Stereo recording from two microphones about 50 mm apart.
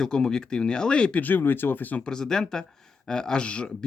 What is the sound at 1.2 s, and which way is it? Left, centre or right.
Speech, left.